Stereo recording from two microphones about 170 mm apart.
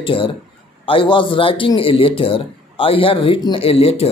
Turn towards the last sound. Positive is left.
turn(degrees=35)  # may be behind; listen again after turning